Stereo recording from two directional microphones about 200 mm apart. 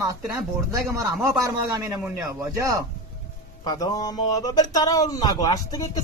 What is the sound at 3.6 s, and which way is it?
Speech, 20° left (ahead or behind).